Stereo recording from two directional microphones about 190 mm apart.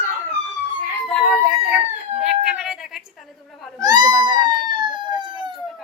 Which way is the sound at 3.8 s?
20° right (ahead or behind).